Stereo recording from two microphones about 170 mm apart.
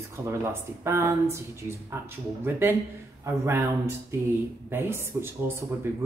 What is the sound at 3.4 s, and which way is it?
A woman's voice, 15° right (ahead or behind).